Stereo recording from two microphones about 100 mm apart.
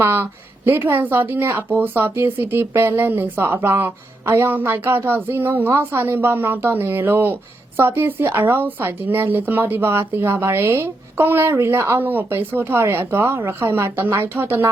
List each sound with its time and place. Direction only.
0.0 s speech: 20° right (ahead or behind)